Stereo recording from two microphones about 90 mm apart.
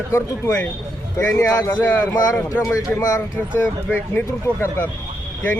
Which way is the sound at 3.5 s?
20° left (ahead or behind).